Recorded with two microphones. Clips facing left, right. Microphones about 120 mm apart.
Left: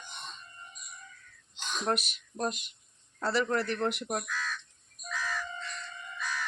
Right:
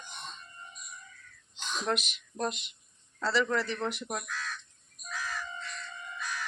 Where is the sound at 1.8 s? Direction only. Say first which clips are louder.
Left 2 dB; 40° left (ahead or behind); by 4.2 s 60° left (ahead or behind).